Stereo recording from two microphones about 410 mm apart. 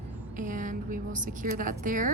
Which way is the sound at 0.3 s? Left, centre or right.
Centre.